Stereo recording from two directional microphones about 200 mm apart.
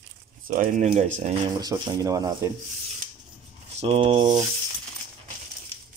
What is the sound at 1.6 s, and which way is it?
Speech, 20° right (ahead or behind).